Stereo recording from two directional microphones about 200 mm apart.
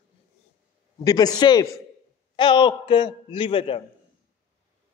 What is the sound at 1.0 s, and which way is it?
A man's voice, 20° left (ahead or behind).